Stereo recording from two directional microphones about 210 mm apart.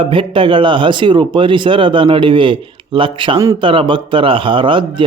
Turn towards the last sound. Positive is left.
turn(degrees=-25)  # may be behind; listen again after turning